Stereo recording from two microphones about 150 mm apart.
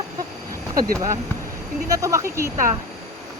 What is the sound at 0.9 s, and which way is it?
Speech, 20° right (ahead or behind).